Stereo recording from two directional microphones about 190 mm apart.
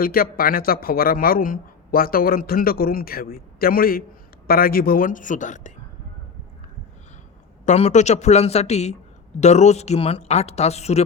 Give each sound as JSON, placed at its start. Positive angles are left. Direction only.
{"t": 0.0, "sound": "a man's voice", "side_deg": 50}
{"t": 7.6, "sound": "speech", "side_deg": 35}